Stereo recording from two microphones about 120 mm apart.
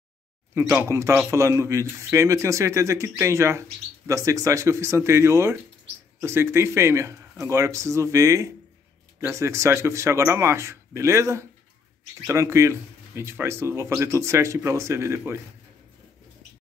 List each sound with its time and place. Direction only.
0.6 s speech: 20° right (ahead or behind)